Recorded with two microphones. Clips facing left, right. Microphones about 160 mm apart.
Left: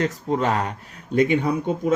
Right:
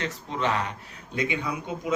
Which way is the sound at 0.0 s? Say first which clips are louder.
Left 7 dB; 45° left (ahead or behind).